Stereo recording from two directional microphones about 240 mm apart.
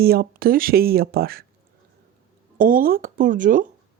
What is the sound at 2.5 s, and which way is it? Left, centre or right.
Speech, right.